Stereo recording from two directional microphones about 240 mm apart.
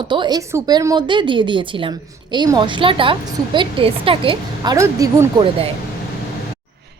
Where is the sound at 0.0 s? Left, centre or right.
Centre.